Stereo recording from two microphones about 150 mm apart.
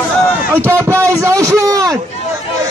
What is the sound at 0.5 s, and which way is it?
A man's voice, 15° right (ahead or behind).